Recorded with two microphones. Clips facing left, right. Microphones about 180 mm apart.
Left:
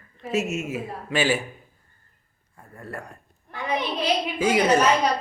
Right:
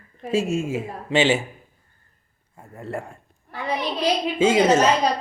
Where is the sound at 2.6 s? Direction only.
25° right (ahead or behind).